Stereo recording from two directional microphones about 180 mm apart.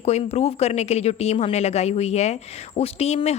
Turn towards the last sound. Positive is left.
turn(degrees=35)  # may be behind; listen again after turning